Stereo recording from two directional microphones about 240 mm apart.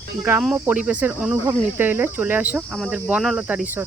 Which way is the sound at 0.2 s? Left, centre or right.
Centre.